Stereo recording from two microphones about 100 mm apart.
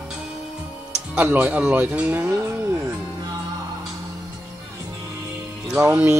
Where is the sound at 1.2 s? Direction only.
15° right (ahead or behind).